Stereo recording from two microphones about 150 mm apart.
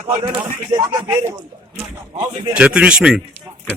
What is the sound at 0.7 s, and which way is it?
Speech, 25° right (ahead or behind).